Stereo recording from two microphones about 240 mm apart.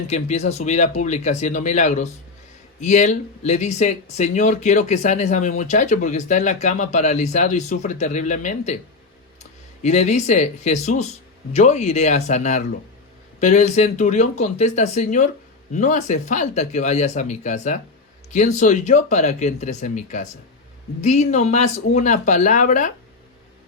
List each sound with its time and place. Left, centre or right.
0.1 s speech: left
9.8 s speech: left